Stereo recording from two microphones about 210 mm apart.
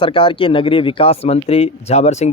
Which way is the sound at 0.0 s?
25° left (ahead or behind).